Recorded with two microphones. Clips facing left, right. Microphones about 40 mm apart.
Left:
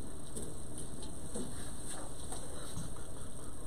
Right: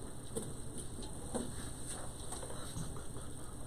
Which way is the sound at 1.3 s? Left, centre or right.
Right.